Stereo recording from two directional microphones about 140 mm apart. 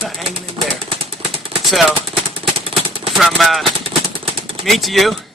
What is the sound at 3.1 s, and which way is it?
Speech, centre (ahead or behind).